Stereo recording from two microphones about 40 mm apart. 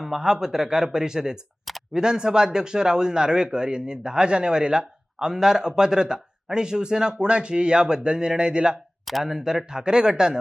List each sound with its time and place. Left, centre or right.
0.0 s speech: centre